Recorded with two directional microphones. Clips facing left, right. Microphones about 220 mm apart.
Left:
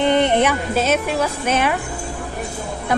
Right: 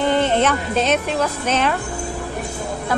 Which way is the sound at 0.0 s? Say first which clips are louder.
Left 1 dB; 20° left (ahead or behind).